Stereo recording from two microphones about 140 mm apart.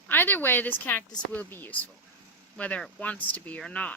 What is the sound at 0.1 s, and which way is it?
Speech, 15° left (ahead or behind).